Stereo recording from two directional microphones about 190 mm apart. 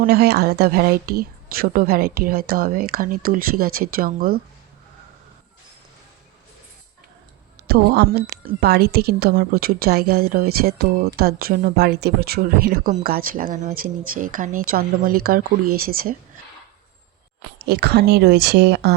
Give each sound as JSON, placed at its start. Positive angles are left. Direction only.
{"t": 0.0, "sound": "a woman's voice", "side_deg": -55}
{"t": 7.7, "sound": "a woman's voice", "side_deg": -55}
{"t": 17.6, "sound": "speech", "side_deg": -60}